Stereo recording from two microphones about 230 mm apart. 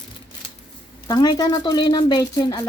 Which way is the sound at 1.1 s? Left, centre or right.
Centre.